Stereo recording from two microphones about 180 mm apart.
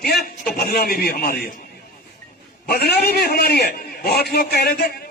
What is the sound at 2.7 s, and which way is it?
A man's voice, 60° left (ahead or behind).